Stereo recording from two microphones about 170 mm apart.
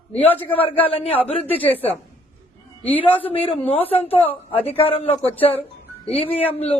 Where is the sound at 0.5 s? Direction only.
35° left (ahead or behind).